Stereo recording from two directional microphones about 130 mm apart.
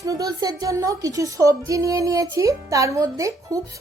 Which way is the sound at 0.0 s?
25° right (ahead or behind).